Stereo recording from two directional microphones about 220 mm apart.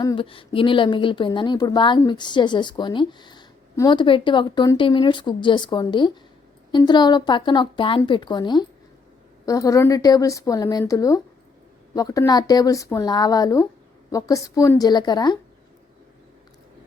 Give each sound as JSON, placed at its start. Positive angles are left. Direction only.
{"t": 0.0, "sound": "a woman's voice", "side_deg": 20}